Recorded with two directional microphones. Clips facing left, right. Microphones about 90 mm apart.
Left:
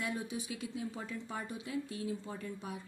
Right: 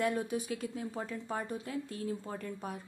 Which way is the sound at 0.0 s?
50° right (ahead or behind).